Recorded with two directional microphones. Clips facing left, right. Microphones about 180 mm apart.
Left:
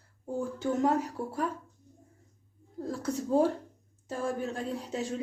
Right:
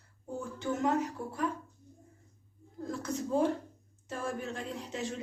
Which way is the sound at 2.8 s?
35° left (ahead or behind).